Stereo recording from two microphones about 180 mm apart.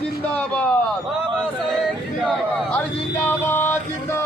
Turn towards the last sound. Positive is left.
turn(degrees=10)  # may be behind; listen again after turning